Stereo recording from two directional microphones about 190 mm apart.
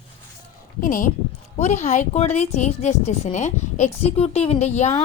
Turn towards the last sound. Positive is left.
turn(degrees=35)  # may be behind; listen again after turning